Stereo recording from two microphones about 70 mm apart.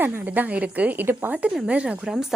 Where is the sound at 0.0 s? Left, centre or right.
Right.